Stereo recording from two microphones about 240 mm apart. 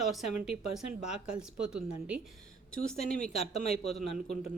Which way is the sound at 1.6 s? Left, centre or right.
Centre.